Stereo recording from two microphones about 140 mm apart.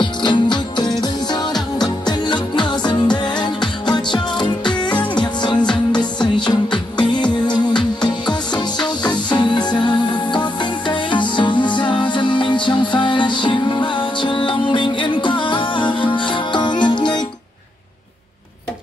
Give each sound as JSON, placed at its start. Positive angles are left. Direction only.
{"t": 0.0, "sound": "music", "side_deg": 35}